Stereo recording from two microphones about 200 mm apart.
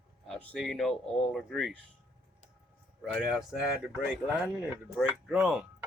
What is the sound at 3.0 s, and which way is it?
Speech, 5° right (ahead or behind).